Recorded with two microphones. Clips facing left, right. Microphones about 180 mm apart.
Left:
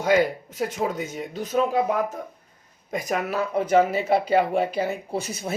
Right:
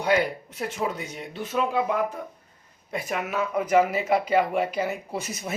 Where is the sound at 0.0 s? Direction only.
40° left (ahead or behind).